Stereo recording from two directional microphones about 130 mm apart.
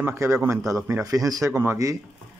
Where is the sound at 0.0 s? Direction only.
20° right (ahead or behind).